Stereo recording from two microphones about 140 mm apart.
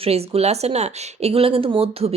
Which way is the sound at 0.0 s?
45° right (ahead or behind).